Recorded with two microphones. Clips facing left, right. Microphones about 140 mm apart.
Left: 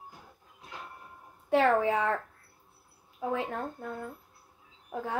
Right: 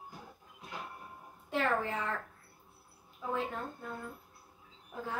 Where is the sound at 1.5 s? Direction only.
75° left (ahead or behind).